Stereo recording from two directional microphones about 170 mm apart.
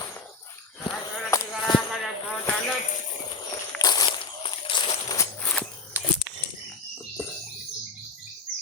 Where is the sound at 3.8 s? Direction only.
25° left (ahead or behind).